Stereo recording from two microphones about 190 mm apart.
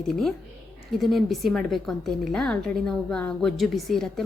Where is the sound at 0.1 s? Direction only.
Centre (ahead or behind).